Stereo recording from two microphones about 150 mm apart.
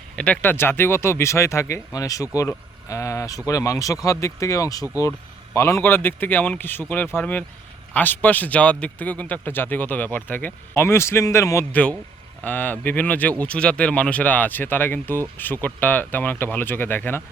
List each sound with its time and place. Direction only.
0.2 s a man's voice: 10° left (ahead or behind)